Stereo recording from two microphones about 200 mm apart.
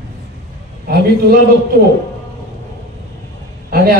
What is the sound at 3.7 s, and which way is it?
Speech, 50° right (ahead or behind).